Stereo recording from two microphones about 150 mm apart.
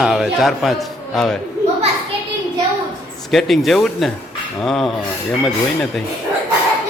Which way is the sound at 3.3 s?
Centre (ahead or behind).